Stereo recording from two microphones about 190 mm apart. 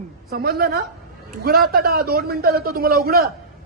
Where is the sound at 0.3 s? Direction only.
50° right (ahead or behind).